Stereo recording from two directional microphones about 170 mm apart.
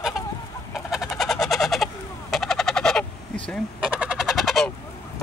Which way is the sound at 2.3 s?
Centre (ahead or behind).